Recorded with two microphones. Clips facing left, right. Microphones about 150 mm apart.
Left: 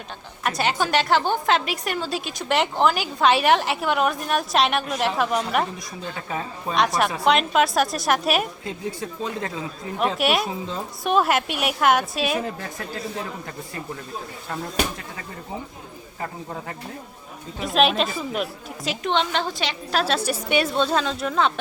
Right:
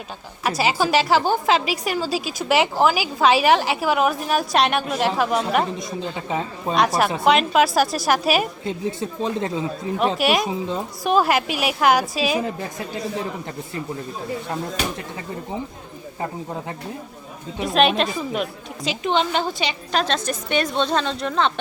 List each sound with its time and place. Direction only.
0.4 s a woman's voice: 5° right (ahead or behind)
5.7 s a woman's voice: 20° right (ahead or behind)
6.7 s a woman's voice: centre (ahead or behind)
9.0 s a woman's voice: 25° right (ahead or behind)
10.2 s a woman's voice: centre (ahead or behind)
17.6 s a woman's voice: centre (ahead or behind)